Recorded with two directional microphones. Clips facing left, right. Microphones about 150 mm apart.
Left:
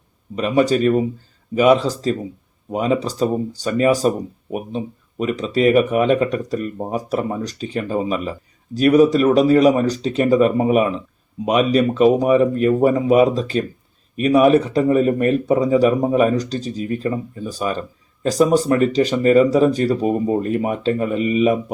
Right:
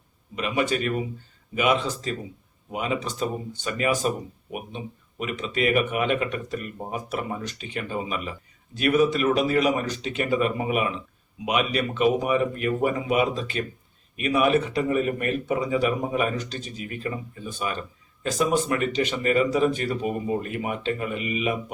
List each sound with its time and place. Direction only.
0.3 s speech: 40° left (ahead or behind)